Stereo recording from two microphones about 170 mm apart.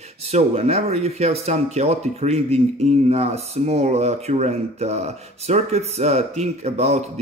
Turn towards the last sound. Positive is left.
turn(degrees=-40)  # may be behind; listen again after turning